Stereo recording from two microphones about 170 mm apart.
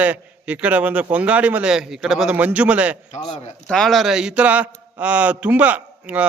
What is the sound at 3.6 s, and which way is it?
A man's voice, 5° left (ahead or behind).